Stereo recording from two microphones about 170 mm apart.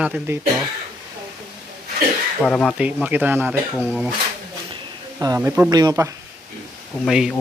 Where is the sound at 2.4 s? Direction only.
5° left (ahead or behind).